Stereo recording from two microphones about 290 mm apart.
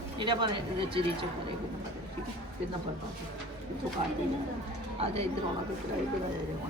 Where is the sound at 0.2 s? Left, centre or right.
Centre.